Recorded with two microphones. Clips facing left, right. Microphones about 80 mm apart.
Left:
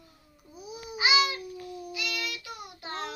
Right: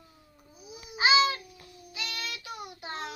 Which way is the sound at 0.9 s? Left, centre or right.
Right.